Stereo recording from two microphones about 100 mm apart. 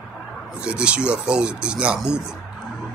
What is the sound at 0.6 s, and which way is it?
Speech, 10° right (ahead or behind).